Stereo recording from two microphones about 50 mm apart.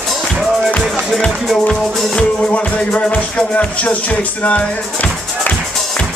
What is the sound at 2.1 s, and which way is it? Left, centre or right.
Music, left.